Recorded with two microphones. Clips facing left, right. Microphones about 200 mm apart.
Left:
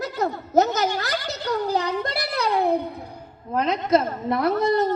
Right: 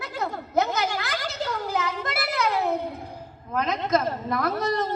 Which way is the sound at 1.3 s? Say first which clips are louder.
Left 5 dB; 40° left (ahead or behind).